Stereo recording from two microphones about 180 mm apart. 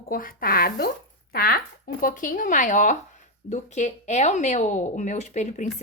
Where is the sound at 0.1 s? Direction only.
55° left (ahead or behind).